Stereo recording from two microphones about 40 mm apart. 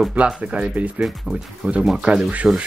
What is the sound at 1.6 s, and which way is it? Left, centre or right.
Speech, right.